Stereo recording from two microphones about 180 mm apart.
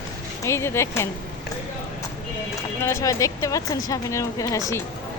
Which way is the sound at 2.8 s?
15° left (ahead or behind).